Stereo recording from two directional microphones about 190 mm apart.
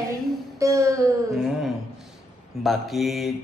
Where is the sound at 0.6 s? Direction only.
15° right (ahead or behind).